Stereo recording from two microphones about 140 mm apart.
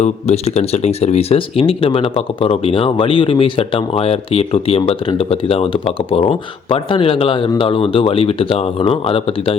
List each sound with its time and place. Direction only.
0.0 s speech: 50° left (ahead or behind)